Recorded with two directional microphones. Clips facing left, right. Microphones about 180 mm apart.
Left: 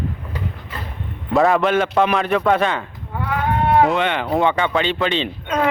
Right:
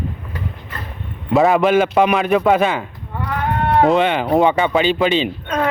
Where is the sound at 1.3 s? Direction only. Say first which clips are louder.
Right 3 dB; centre (ahead or behind).